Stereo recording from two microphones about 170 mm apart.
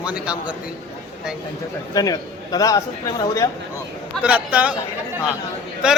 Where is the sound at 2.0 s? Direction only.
20° left (ahead or behind).